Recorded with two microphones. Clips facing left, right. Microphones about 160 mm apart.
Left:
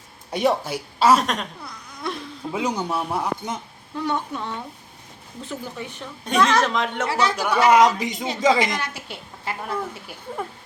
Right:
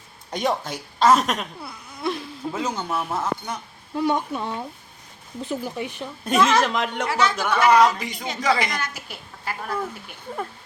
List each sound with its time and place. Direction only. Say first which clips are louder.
0.3 s speech: left 3 dB; 5° left (ahead or behind)
2.5 s a woman's voice: left 2 dB; 10° left (ahead or behind)
3.9 s speech: right 3 dB; 15° right (ahead or behind)
6.2 s a woman's voice: even; 5° right (ahead or behind)
7.1 s speech: even; 30° left (ahead or behind)
7.3 s a woman's voice: left 1 dB; 10° left (ahead or behind)